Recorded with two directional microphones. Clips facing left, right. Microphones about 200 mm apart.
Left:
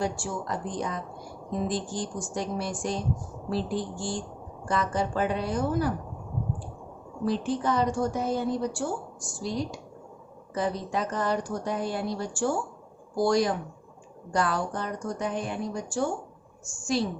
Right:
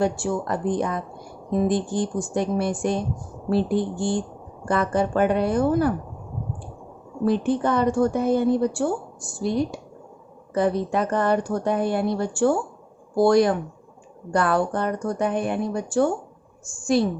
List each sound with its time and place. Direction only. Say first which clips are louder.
0.0 s speech: right 7 dB; 60° right (ahead or behind)
7.3 s speech: right 6 dB; 60° right (ahead or behind)